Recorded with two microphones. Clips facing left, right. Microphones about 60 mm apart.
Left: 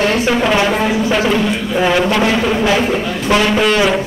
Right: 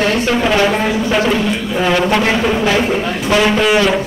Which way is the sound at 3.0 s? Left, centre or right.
Centre.